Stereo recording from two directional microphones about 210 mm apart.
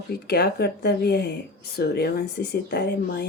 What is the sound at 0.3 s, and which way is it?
Speech, 50° left (ahead or behind).